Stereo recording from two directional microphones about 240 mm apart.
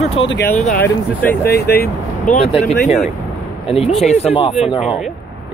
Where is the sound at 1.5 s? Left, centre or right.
Left.